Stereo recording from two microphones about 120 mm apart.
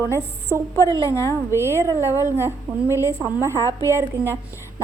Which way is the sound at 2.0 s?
25° left (ahead or behind).